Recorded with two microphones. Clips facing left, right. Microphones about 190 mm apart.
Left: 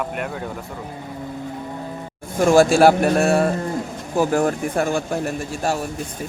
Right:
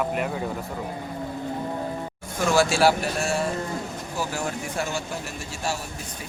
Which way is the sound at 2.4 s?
50° left (ahead or behind).